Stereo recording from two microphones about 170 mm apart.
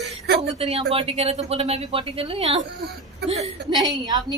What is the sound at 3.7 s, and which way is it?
Speech, 25° right (ahead or behind).